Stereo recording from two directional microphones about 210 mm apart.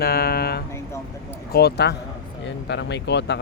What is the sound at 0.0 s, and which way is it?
Speech, 50° left (ahead or behind).